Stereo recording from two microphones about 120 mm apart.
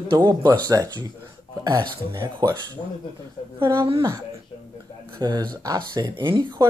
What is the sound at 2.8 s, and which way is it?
Speech, 50° left (ahead or behind).